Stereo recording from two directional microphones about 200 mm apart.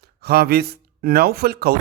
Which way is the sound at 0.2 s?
50° right (ahead or behind).